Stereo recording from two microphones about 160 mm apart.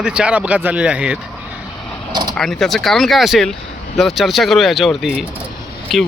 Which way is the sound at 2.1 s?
25° right (ahead or behind).